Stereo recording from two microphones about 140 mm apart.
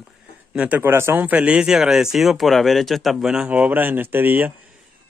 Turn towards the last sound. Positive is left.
turn(degrees=-10)  # may be behind; listen again after turning